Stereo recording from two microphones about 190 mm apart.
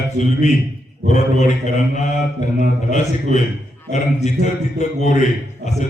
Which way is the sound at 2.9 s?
40° left (ahead or behind).